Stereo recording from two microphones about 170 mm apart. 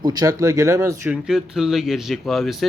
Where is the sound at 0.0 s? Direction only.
25° right (ahead or behind).